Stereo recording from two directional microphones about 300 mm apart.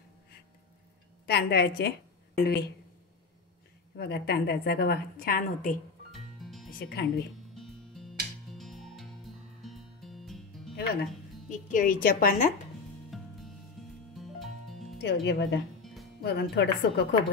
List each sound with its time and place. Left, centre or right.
1.2 s a woman's voice: left
3.9 s a woman's voice: left
6.1 s music: centre
6.8 s a woman's voice: left
7.5 s mosquito: centre
9.6 s music: centre
11.4 s a woman's voice: left
13.1 s music: centre
15.0 s a woman's voice: left
15.8 s music: centre
16.2 s a woman's voice: left